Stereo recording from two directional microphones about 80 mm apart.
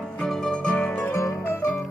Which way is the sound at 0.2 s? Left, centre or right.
Centre.